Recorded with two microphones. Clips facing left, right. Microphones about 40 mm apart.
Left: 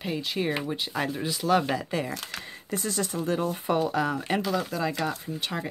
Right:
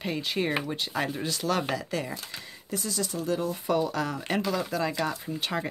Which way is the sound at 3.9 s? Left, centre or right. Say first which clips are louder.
Left 3 dB; centre.